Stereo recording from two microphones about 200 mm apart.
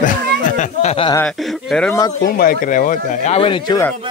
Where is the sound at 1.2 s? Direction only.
Centre (ahead or behind).